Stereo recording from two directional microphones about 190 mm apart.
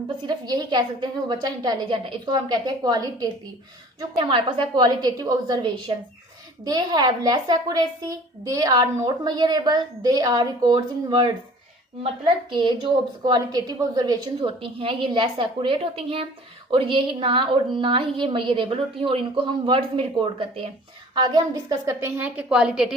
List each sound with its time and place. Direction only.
0.2 s a woman's voice: 20° right (ahead or behind)
12.5 s a woman's voice: 25° right (ahead or behind); by 23.0 s 5° right (ahead or behind)